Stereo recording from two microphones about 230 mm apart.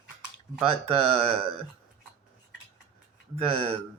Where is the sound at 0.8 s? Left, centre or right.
Right.